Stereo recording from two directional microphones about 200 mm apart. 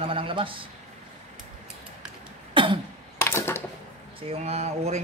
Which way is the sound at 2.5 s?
25° right (ahead or behind).